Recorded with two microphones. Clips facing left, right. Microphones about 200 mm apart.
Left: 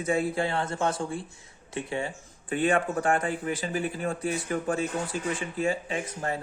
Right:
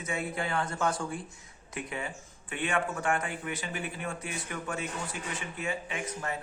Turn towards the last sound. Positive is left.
turn(degrees=35)  # may be behind; listen again after turning